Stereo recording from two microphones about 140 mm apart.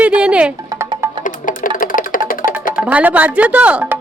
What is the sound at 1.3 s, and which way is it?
Music, 70° left (ahead or behind).